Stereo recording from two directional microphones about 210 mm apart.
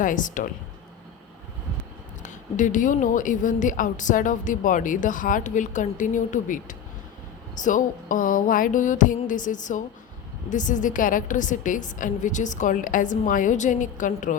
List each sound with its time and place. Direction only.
0.0 s a woman's voice: 40° left (ahead or behind)
2.2 s a woman's voice: 35° left (ahead or behind)